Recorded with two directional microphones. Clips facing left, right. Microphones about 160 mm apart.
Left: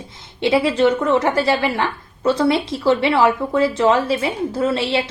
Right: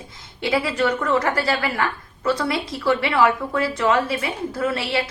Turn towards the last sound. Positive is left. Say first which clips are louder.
# left 4 dB
turn(degrees=25)  # may be behind; listen again after turning